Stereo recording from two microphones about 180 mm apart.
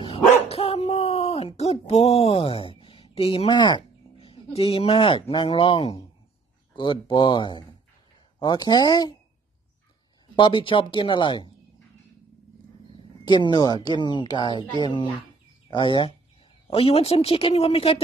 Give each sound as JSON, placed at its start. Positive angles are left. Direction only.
{"t": 0.0, "sound": "dog", "side_deg": 30}
{"t": 6.7, "sound": "speech", "side_deg": 25}
{"t": 10.3, "sound": "speech", "side_deg": 25}
{"t": 13.2, "sound": "speech", "side_deg": 25}